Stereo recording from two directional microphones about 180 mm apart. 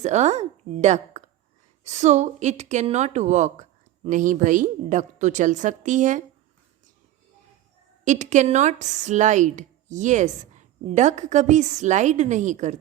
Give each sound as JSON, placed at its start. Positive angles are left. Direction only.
{"t": 0.0, "sound": "a woman's voice", "side_deg": -40}
{"t": 8.0, "sound": "speech", "side_deg": -45}